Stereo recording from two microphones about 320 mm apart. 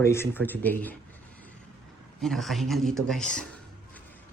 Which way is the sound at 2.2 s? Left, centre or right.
Centre.